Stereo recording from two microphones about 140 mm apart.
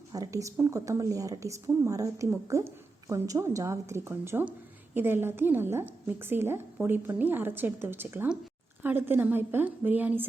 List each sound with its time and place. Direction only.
0.1 s a woman's voice: 25° right (ahead or behind)